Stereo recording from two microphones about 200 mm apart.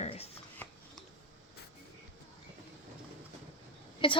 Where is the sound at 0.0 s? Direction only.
30° left (ahead or behind).